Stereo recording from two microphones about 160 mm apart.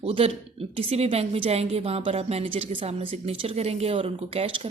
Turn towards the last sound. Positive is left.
turn(degrees=-35)  # may be behind; listen again after turning